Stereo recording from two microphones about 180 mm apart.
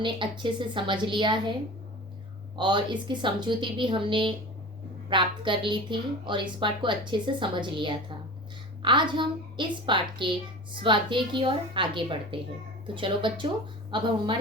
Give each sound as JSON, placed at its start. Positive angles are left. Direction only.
{"t": 0.0, "sound": "a woman's voice", "side_deg": -25}
{"t": 2.6, "sound": "a woman's voice", "side_deg": -25}